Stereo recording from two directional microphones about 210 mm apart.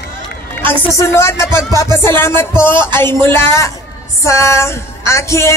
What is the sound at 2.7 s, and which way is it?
Music, 20° right (ahead or behind).